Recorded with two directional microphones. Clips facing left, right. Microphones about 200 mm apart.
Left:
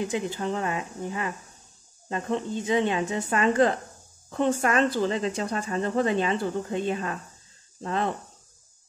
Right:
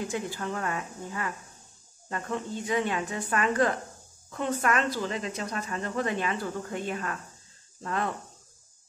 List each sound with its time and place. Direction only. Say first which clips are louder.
0.0 s speech: left 4 dB; 20° left (ahead or behind)